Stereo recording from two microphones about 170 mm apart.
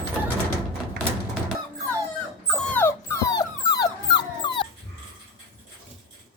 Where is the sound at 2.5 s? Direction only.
5° left (ahead or behind); by 4.7 s 25° left (ahead or behind).